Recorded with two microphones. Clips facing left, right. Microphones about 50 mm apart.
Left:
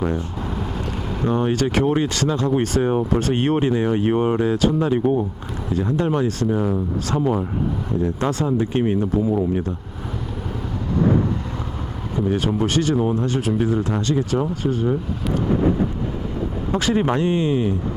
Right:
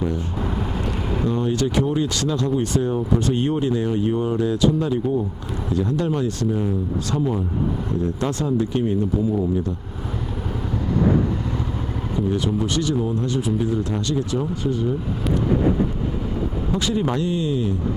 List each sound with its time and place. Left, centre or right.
1.3 s speech: left
2.5 s speech: left
4.9 s speech: left
5.7 s speech: left
12.1 s speech: left
13.4 s speech: left
13.7 s speech: left
16.3 s vehicle: centre
16.7 s speech: left